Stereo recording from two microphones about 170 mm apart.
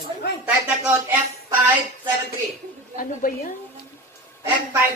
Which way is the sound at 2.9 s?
55° left (ahead or behind).